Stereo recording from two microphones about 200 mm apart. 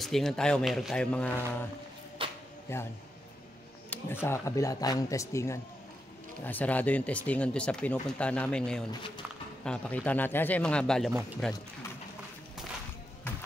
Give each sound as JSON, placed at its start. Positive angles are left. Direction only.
{"t": 0.0, "sound": "speech", "side_deg": 0}
{"t": 2.2, "sound": "a sound", "side_deg": -25}
{"t": 2.7, "sound": "speech", "side_deg": 15}
{"t": 3.9, "sound": "speech", "side_deg": 10}